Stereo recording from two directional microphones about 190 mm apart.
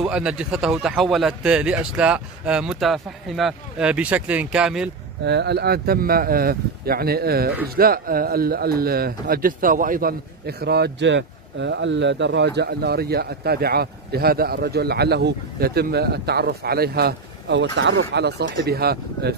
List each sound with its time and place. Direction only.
0.0 s speech: 5° right (ahead or behind)
5.2 s speech: 60° right (ahead or behind)